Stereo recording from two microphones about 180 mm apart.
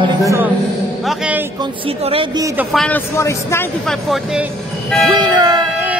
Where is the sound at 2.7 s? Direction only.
5° left (ahead or behind).